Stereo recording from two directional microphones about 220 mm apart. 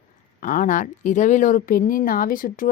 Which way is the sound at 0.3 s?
35° left (ahead or behind).